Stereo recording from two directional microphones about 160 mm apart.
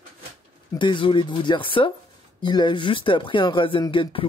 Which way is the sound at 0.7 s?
30° left (ahead or behind).